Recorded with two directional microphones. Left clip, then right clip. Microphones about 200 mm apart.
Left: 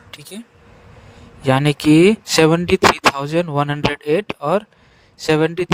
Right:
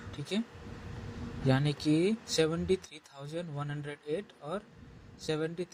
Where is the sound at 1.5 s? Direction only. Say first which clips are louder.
Left 16 dB; 50° left (ahead or behind).